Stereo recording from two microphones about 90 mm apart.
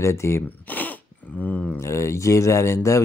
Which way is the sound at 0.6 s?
20° left (ahead or behind).